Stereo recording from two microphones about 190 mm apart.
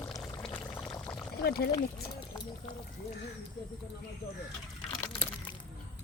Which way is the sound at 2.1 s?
20° left (ahead or behind).